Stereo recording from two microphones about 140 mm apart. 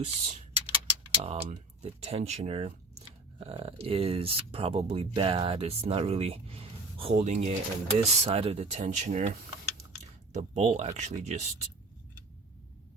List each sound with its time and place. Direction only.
0.0 s speech: 55° right (ahead or behind)
0.7 s a sound: 45° right (ahead or behind)
1.8 s speech: 50° right (ahead or behind)